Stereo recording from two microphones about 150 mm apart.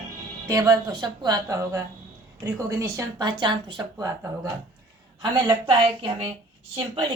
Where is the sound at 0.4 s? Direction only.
25° right (ahead or behind).